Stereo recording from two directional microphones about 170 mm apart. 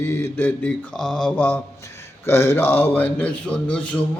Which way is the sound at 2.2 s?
15° left (ahead or behind).